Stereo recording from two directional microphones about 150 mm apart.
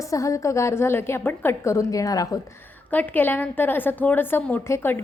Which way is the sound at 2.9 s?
10° left (ahead or behind).